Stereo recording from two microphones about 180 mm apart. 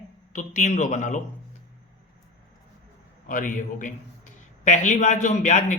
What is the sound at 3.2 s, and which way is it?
A man's voice, 45° left (ahead or behind).